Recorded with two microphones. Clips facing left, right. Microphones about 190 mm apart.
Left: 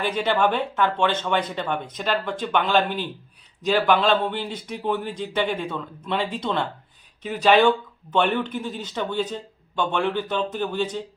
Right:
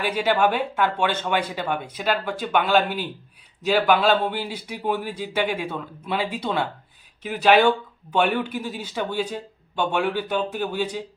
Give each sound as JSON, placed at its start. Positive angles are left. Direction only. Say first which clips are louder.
{"t": 0.0, "sound": "speech", "louder": "right 1 dB", "side_deg": -10}